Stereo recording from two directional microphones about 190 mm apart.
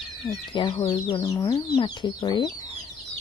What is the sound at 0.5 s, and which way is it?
Speech, 25° left (ahead or behind).